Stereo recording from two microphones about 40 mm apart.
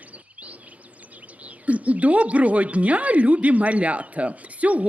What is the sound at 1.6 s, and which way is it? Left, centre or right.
Speech, right.